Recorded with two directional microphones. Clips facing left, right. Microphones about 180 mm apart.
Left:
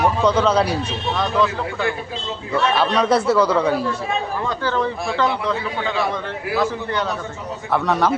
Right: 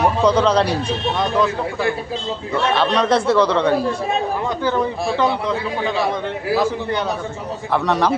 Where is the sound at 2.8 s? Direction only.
5° left (ahead or behind).